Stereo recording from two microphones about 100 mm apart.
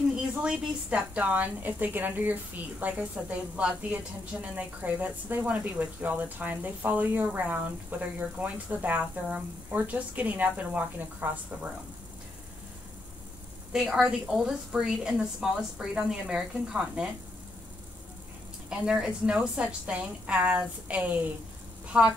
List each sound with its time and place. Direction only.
0.4 s a woman's voice: 10° right (ahead or behind)
13.8 s a woman's voice: centre (ahead or behind)
18.7 s a woman's voice: 5° right (ahead or behind)